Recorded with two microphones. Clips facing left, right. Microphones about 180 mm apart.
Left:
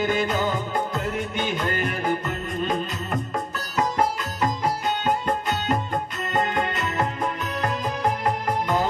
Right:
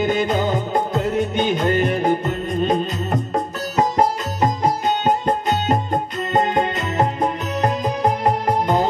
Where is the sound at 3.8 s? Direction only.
20° right (ahead or behind).